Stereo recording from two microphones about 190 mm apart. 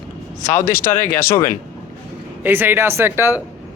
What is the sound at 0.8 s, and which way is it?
Speech, 45° left (ahead or behind).